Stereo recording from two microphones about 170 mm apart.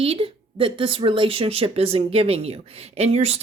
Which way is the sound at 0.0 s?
35° right (ahead or behind).